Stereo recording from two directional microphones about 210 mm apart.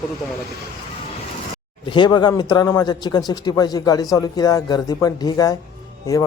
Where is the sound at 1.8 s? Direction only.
20° left (ahead or behind).